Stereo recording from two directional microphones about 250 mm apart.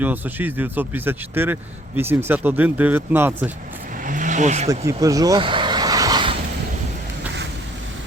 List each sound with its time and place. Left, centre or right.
0.0 s speech: centre
4.0 s vehicle: right
4.9 s vehicle: centre